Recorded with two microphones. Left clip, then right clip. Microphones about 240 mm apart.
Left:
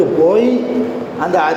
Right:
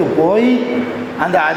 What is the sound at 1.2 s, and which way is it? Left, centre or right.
Speech, right.